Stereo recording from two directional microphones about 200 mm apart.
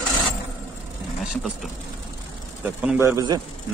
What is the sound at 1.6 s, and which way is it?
Speech, centre (ahead or behind).